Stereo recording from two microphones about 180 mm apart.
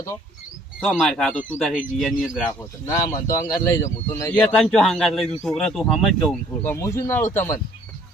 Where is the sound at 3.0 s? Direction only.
20° left (ahead or behind); by 6.4 s centre (ahead or behind).